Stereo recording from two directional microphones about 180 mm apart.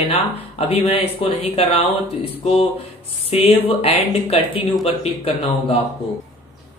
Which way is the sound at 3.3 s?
35° left (ahead or behind).